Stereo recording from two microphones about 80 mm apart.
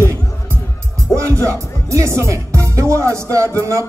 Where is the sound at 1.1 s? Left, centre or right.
Right.